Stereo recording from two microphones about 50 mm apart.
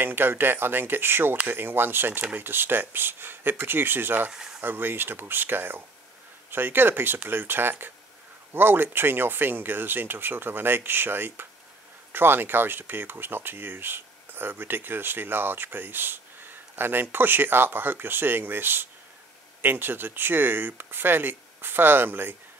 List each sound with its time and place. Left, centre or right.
0.0 s speech: right
4.3 s speech: centre
4.6 s speech: right